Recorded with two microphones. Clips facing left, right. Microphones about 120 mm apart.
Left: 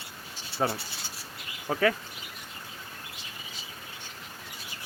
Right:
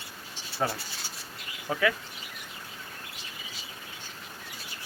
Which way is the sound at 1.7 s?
35° left (ahead or behind).